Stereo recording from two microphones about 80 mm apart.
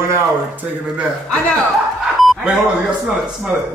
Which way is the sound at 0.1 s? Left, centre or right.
Right.